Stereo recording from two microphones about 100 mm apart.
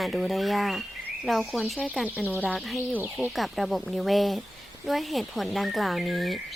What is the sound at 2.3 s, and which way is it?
Speech, 15° left (ahead or behind).